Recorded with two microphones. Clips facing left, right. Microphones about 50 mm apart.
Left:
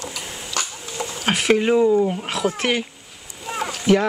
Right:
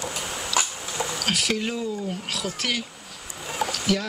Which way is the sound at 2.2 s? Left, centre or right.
Left.